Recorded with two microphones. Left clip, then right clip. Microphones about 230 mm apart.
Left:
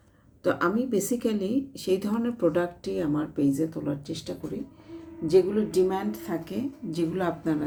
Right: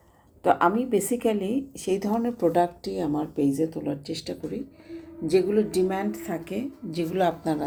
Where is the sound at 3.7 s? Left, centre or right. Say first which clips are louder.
Right 1 dB; left.